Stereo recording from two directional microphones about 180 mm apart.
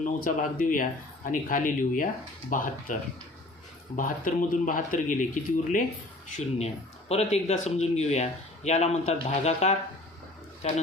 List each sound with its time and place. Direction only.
0.0 s speech: 50° left (ahead or behind)
7.1 s speech: 35° left (ahead or behind)